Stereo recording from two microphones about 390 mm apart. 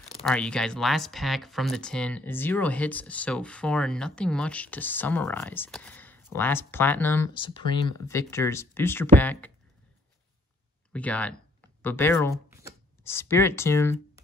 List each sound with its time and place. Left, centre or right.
0.2 s speech: centre
10.9 s speech: centre